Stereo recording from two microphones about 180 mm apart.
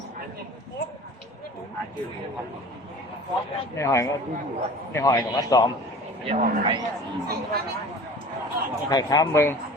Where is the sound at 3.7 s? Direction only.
15° left (ahead or behind).